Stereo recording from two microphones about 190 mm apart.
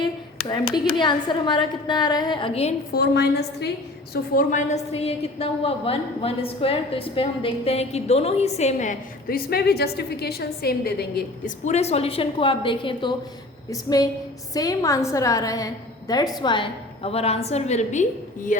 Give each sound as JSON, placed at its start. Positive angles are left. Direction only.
{"t": 0.4, "sound": "a woman's voice", "side_deg": 20}
{"t": 2.9, "sound": "a woman's voice", "side_deg": 60}
{"t": 4.1, "sound": "a woman's voice", "side_deg": 45}
{"t": 11.6, "sound": "a woman's voice", "side_deg": 35}